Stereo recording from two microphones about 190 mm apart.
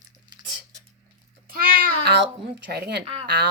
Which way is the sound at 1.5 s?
50° right (ahead or behind).